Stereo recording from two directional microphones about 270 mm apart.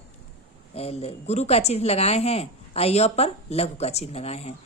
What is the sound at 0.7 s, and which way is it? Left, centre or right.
A woman's voice, left.